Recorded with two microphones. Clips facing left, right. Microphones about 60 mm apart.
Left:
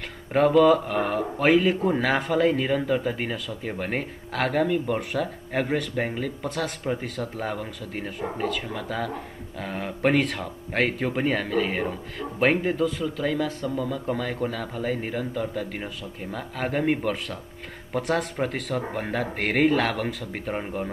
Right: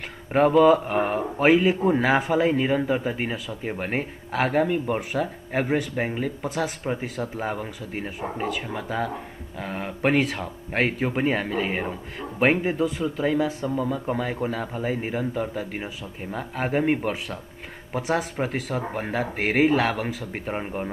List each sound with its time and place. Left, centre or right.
0.3 s speech: centre
1.4 s speech: centre